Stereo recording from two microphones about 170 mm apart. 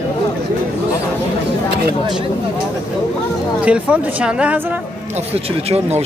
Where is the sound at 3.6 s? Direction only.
5° right (ahead or behind).